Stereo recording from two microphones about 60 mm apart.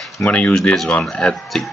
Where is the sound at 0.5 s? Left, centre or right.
Centre.